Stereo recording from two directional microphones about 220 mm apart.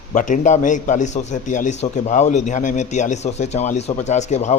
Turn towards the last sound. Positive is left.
turn(degrees=30)  # may be behind; listen again after turning